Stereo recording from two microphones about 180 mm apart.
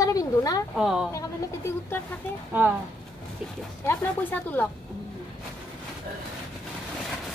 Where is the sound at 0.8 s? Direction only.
5° right (ahead or behind).